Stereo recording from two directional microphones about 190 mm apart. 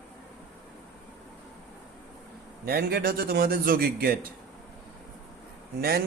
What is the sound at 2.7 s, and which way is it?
A man's voice, 55° right (ahead or behind).